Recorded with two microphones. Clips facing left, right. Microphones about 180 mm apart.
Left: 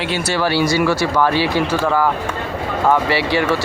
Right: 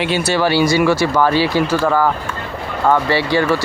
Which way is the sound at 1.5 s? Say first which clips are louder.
Right 2 dB; centre (ahead or behind).